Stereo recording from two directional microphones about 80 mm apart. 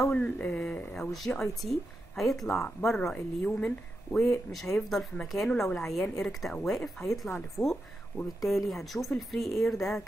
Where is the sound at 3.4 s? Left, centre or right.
Centre.